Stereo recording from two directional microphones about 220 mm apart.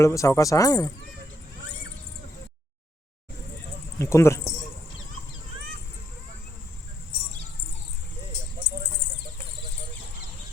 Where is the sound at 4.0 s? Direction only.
10° left (ahead or behind).